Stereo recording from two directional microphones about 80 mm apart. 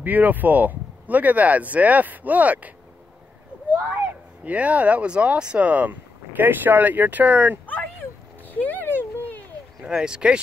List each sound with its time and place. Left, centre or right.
0.0 s speech: right
3.7 s speech: centre
8.6 s a sound: left
9.8 s speech: centre